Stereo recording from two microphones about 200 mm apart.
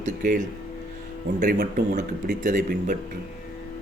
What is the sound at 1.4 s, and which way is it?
A man's voice, 50° right (ahead or behind).